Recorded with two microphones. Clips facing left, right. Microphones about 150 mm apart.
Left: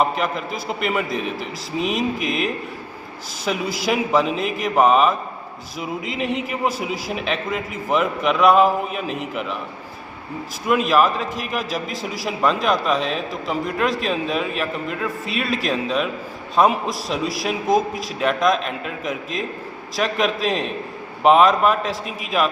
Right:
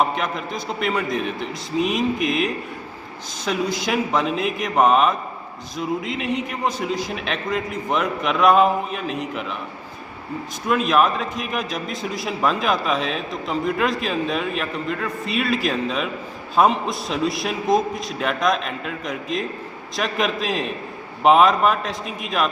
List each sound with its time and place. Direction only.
0.0 s a man's voice: centre (ahead or behind)
10.7 s a man's voice: centre (ahead or behind)